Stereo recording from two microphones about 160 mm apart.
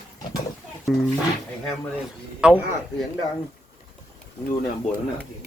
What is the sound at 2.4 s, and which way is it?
Speech, 5° right (ahead or behind).